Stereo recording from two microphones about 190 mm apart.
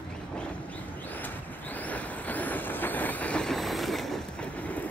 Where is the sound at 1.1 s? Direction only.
10° left (ahead or behind).